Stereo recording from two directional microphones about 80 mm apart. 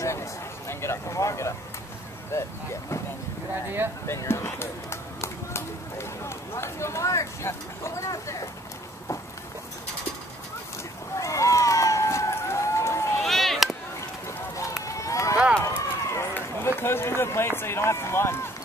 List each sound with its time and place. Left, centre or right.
0.0 s a sound: left
2.3 s speech: left
4.1 s speech: left
11.1 s run: left
13.2 s a sound: centre
14.9 s run: left